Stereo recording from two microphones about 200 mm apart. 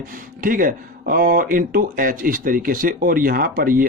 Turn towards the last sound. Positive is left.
turn(degrees=-45)  # may be behind; listen again after turning